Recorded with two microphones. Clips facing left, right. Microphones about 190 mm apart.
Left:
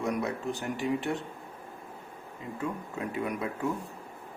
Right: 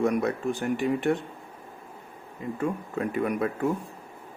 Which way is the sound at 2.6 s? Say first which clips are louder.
Right 5 dB; 55° right (ahead or behind).